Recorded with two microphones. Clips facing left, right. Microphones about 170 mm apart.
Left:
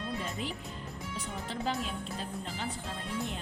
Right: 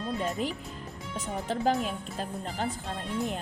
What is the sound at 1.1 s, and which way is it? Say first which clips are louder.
A woman's voice: right 7 dB; 45° right (ahead or behind).